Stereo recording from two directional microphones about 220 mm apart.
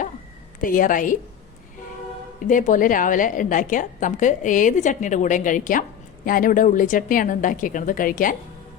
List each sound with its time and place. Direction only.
0.6 s a woman's voice: 40° left (ahead or behind)
2.5 s a woman's voice: 35° left (ahead or behind)